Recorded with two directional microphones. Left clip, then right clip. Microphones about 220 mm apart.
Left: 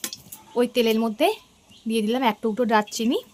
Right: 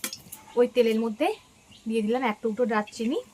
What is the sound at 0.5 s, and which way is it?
A woman's voice, 55° left (ahead or behind).